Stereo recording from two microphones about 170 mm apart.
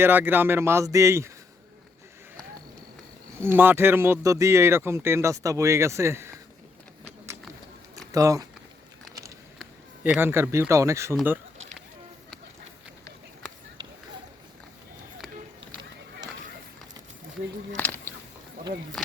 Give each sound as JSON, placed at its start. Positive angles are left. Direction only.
{"t": 0.0, "sound": "speech", "side_deg": -10}
{"t": 3.4, "sound": "speech", "side_deg": -10}
{"t": 8.1, "sound": "speech", "side_deg": -20}
{"t": 9.6, "sound": "speech", "side_deg": -5}
{"t": 17.7, "sound": "a sound", "side_deg": 10}